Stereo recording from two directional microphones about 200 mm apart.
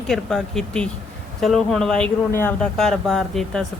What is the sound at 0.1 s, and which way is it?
Speech, centre (ahead or behind).